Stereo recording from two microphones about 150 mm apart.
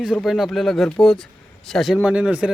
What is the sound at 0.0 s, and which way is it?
Speech, 5° right (ahead or behind).